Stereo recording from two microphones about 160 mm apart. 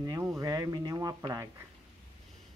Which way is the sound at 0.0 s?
20° right (ahead or behind).